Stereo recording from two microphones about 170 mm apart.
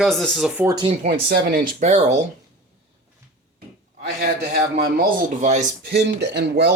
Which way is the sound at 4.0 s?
70° right (ahead or behind).